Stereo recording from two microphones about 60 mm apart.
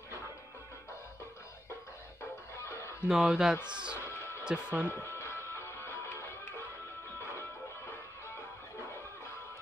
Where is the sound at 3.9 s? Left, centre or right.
Left.